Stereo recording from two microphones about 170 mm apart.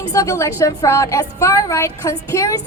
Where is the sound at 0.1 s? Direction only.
20° left (ahead or behind).